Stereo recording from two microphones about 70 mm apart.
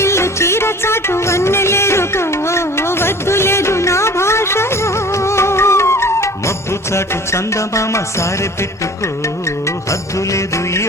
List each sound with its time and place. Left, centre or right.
0.0 s music: left